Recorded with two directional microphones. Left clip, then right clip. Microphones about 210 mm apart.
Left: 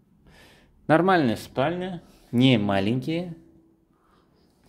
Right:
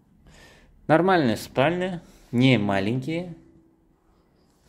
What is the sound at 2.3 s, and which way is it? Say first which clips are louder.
Speech: even; 10° left (ahead or behind).